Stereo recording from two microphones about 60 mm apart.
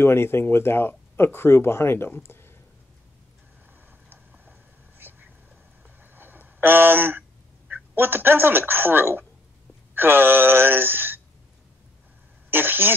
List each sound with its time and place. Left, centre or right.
0.0 s speech: left
4.1 s a sound: right
7.7 s speech: right
12.4 s speech: right